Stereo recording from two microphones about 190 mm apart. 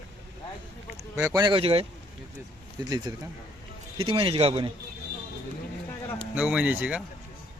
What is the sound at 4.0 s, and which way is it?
Speech, 30° right (ahead or behind).